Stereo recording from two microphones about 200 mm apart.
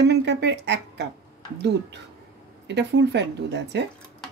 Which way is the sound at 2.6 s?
60° right (ahead or behind).